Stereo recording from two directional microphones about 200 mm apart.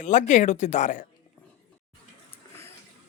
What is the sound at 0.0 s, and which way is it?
Speech, 40° left (ahead or behind).